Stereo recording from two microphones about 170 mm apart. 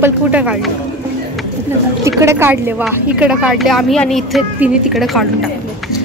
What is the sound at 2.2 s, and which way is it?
Speech, 15° right (ahead or behind).